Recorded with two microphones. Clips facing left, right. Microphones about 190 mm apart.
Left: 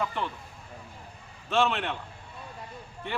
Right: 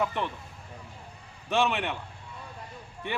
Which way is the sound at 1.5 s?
15° right (ahead or behind).